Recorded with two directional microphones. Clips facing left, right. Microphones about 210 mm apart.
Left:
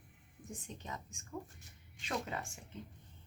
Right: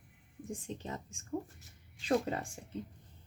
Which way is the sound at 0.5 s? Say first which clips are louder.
Right 5 dB; 30° right (ahead or behind).